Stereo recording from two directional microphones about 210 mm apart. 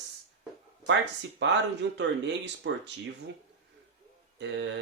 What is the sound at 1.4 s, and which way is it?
Speech, 55° right (ahead or behind).